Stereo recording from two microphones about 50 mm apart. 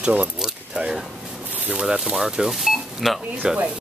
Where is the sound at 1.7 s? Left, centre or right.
Centre.